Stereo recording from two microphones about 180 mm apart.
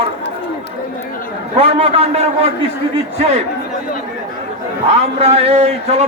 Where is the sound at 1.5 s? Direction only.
35° right (ahead or behind).